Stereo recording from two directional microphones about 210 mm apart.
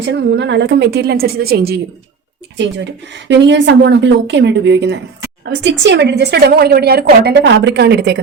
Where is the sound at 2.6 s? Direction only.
60° right (ahead or behind).